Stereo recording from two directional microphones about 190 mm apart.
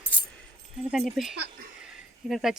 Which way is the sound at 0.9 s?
Centre (ahead or behind).